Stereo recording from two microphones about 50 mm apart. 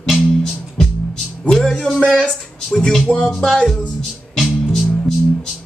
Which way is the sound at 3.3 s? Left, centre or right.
Centre.